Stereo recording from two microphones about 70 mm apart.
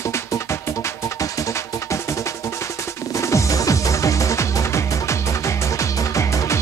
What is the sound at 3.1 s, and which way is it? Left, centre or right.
Music, left.